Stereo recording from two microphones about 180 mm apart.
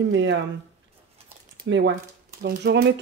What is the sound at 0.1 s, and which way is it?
Speech, 90° right.